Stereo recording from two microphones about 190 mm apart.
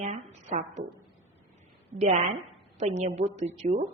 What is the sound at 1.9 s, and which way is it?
A woman's voice, 35° right (ahead or behind).